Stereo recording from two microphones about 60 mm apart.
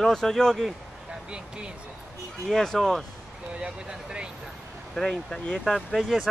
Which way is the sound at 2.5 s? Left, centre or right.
Centre.